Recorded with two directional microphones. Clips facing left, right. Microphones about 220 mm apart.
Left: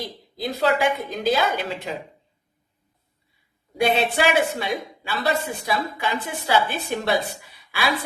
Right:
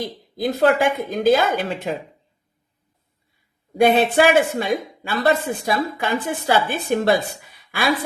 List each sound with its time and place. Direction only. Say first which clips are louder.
0.0 s speech: right 6 dB; 50° right (ahead or behind)
3.8 s speech: right 6 dB; 50° right (ahead or behind)